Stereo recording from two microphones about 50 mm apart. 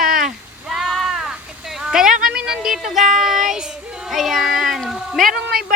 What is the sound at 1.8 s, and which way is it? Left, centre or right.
Child singing, centre.